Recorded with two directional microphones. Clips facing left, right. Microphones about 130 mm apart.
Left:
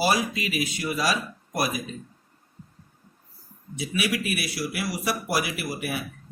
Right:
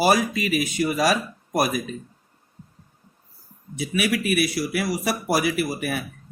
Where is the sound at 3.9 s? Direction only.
50° right (ahead or behind).